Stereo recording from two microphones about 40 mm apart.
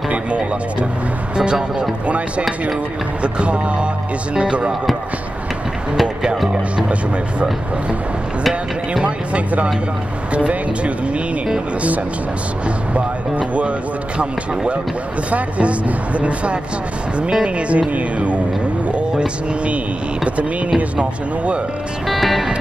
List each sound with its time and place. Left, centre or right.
0.1 s music: right
1.3 s speech: right
3.2 s speech: right
9.0 s music: right
12.6 s speech: right
15.3 s music: right
17.2 s speech: right
17.6 s music: right
18.9 s speech: right
22.0 s music: centre